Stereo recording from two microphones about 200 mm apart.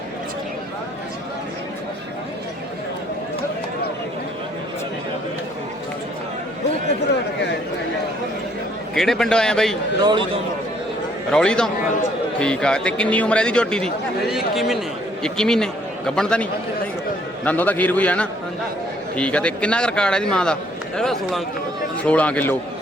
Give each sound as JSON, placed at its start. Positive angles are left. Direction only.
{"t": 9.0, "sound": "a man's voice", "side_deg": 0}
{"t": 10.0, "sound": "speech", "side_deg": -20}
{"t": 11.3, "sound": "a man's voice", "side_deg": 5}